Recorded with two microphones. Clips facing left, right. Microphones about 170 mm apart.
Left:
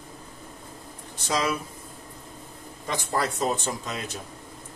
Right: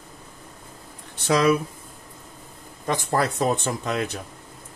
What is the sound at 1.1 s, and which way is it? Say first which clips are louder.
Speech: right 8 dB; 60° right (ahead or behind).